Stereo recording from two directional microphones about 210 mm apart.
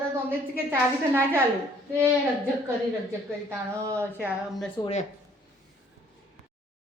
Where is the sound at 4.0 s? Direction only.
10° right (ahead or behind).